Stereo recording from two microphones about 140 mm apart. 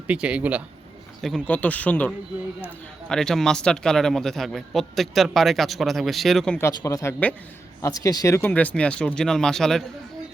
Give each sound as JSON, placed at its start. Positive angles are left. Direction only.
{"t": 0.1, "sound": "speech", "side_deg": -10}
{"t": 1.2, "sound": "a man's voice", "side_deg": 5}
{"t": 6.6, "sound": "speech", "side_deg": 20}